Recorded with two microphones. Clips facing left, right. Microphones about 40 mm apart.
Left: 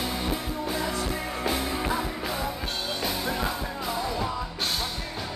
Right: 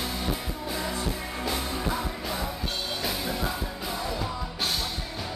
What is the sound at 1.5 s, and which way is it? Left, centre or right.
Music, centre.